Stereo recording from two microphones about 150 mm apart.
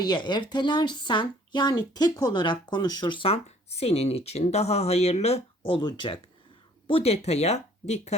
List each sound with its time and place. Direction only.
0.0 s speech: 30° left (ahead or behind); by 8.1 s 50° left (ahead or behind)